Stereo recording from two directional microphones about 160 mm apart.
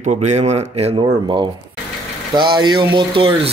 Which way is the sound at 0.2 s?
35° right (ahead or behind).